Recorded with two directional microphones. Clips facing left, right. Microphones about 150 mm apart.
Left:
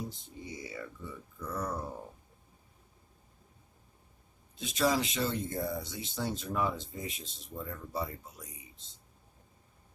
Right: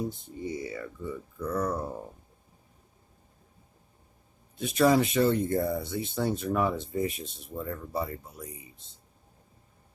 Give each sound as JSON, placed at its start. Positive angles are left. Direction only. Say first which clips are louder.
{"t": 0.1, "sound": "speech", "louder": "right 9 dB", "side_deg": -55}
{"t": 4.5, "sound": "speech", "louder": "right 7 dB", "side_deg": -55}